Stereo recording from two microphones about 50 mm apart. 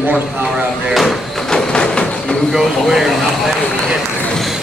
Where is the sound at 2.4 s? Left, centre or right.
Centre.